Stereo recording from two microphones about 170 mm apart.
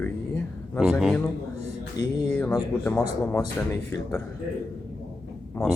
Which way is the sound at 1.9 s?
20° left (ahead or behind).